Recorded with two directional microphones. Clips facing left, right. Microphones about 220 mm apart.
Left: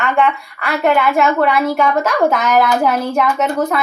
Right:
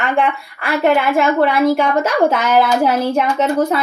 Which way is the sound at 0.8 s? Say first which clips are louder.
Even; 30° right (ahead or behind).